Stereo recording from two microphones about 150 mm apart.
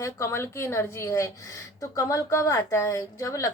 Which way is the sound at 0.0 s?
20° left (ahead or behind).